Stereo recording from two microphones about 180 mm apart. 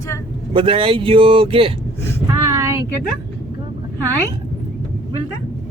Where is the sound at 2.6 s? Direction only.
15° right (ahead or behind).